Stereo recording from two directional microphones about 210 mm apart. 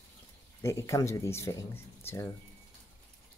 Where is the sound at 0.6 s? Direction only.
15° left (ahead or behind).